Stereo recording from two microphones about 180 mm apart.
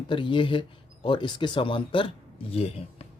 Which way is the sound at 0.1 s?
25° left (ahead or behind).